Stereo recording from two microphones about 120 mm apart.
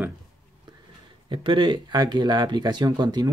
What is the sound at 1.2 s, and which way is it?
Speech, 40° right (ahead or behind).